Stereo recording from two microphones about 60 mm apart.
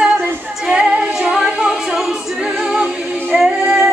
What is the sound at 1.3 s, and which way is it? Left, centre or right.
A capella, centre.